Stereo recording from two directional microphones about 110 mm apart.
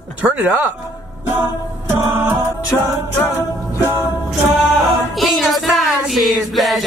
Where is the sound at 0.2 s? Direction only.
15° right (ahead or behind).